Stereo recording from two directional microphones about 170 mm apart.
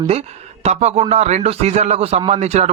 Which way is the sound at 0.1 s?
40° right (ahead or behind).